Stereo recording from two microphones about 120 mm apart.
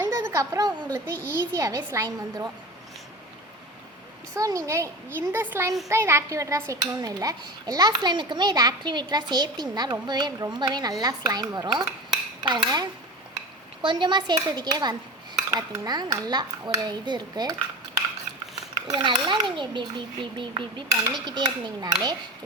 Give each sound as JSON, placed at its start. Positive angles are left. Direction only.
{"t": 0.0, "sound": "a sound", "side_deg": -20}
{"t": 1.2, "sound": "speech", "side_deg": -25}
{"t": 4.4, "sound": "speech", "side_deg": -30}
{"t": 5.9, "sound": "dishes", "side_deg": -20}
{"t": 18.5, "sound": "a child's voice", "side_deg": -40}
{"t": 21.2, "sound": "dishes", "side_deg": -40}